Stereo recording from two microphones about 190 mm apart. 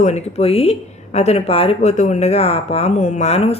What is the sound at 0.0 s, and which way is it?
Speech, 35° left (ahead or behind).